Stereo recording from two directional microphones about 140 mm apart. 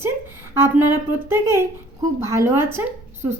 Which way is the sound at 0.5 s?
15° right (ahead or behind).